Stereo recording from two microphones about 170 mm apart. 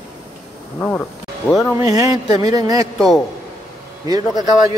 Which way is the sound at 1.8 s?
20° right (ahead or behind).